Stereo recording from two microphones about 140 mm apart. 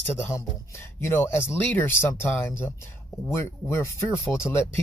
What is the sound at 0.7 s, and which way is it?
Speech, 20° left (ahead or behind).